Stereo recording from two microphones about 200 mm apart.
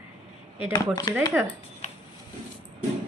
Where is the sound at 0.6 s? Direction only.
20° left (ahead or behind).